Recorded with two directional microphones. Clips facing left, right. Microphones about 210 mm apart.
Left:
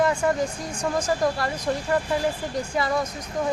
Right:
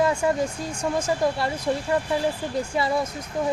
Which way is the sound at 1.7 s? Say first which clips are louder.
Right 1 dB; 20° right (ahead or behind).